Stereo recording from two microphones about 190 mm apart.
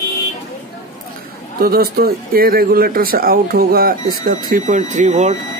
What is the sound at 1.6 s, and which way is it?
Speech, 55° right (ahead or behind).